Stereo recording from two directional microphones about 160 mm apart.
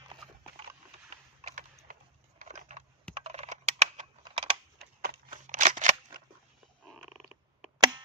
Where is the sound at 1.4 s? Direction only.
50° right (ahead or behind).